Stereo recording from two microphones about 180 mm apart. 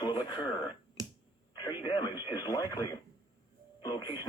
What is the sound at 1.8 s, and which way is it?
Speech, 25° left (ahead or behind).